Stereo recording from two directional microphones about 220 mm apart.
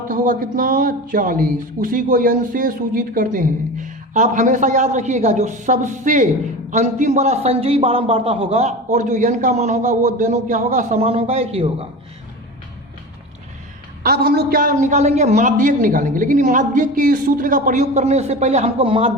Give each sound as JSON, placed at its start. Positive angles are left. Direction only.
{"t": 0.1, "sound": "a man's voice", "side_deg": -40}
{"t": 14.0, "sound": "speech", "side_deg": -45}